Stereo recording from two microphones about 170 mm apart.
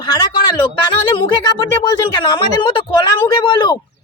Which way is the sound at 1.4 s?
25° left (ahead or behind).